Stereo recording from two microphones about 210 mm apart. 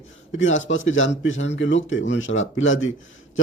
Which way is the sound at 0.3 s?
65° left (ahead or behind).